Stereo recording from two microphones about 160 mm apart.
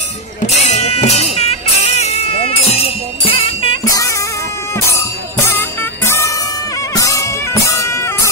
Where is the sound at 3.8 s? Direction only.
20° left (ahead or behind).